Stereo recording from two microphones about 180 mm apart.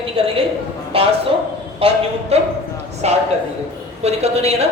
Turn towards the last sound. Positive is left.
turn(degrees=-35)  # may be behind; listen again after turning